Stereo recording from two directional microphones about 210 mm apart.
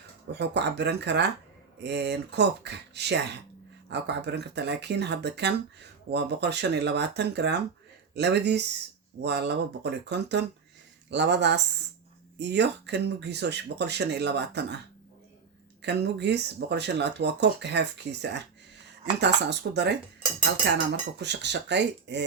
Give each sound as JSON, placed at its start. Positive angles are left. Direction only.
{"t": 0.3, "sound": "speech", "side_deg": -55}
{"t": 15.8, "sound": "speech", "side_deg": -55}